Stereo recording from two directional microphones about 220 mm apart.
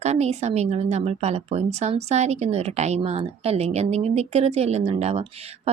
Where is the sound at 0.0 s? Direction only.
30° right (ahead or behind).